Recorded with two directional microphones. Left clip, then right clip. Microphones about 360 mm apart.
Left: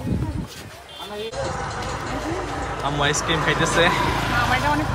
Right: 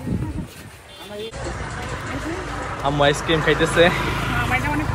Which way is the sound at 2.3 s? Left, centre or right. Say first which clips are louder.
Left 1 dB; left.